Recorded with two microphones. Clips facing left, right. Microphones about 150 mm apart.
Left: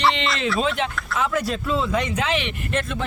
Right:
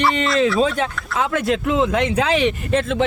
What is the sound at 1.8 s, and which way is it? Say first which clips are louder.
Speech: right 5 dB; 85° right.